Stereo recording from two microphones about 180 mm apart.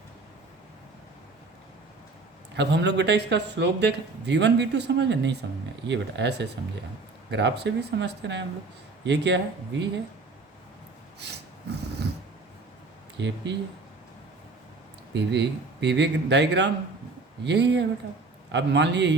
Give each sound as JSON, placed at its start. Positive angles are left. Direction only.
{"t": 2.6, "sound": "a man's voice", "side_deg": -75}
{"t": 11.2, "sound": "a sound", "side_deg": -70}
{"t": 13.1, "sound": "speech", "side_deg": -80}
{"t": 15.1, "sound": "a man's voice", "side_deg": -70}